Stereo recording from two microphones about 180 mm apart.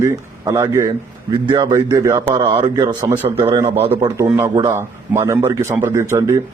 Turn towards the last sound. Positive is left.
turn(degrees=-15)  # may be behind; listen again after turning